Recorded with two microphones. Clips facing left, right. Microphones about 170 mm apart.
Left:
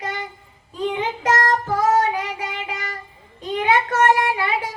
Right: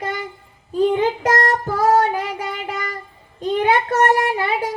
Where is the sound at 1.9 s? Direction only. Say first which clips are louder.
Right 5 dB; 40° right (ahead or behind).